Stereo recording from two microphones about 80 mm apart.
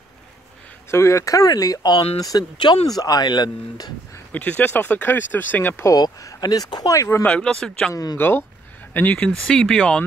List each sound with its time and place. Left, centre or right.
0.8 s speech: left
2.6 s speech: left
3.0 s speech: left
4.3 s speech: left
5.9 s speech: left
7.2 s speech: centre
7.9 s speech: left
8.2 s speech: left
9.2 s speech: centre